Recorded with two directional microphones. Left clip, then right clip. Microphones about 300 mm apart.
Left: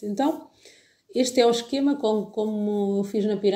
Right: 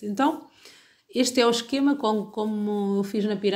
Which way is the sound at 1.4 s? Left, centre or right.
Right.